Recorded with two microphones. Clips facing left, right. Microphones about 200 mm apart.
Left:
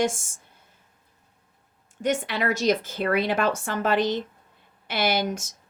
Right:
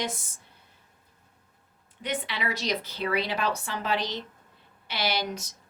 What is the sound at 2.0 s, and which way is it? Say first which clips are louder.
Speech: left 7 dB; 45° left (ahead or behind).